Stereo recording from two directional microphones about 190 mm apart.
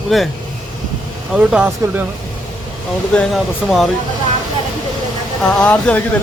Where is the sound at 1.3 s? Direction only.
5° right (ahead or behind).